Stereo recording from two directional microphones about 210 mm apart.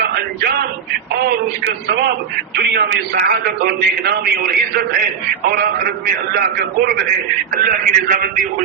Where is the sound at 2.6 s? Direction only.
50° right (ahead or behind).